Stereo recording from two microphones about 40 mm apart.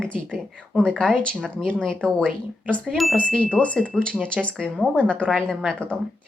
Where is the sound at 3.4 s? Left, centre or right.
Left.